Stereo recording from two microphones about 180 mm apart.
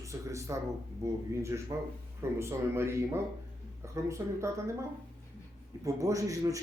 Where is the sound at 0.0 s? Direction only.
15° right (ahead or behind).